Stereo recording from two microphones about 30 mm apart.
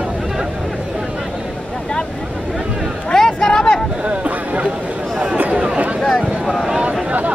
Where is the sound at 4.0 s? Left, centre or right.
Right.